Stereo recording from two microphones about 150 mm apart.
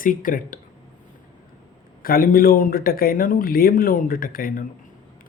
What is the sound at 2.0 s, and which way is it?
Speech, 75° left (ahead or behind).